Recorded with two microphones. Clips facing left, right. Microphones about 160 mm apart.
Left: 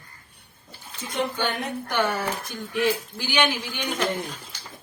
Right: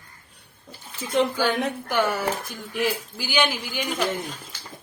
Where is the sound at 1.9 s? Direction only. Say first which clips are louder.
Even; centre (ahead or behind).